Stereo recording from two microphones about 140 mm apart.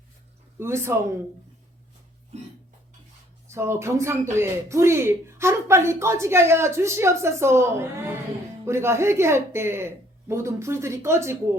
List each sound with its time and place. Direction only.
0.6 s speech: 20° right (ahead or behind)
3.4 s speech: 20° right (ahead or behind)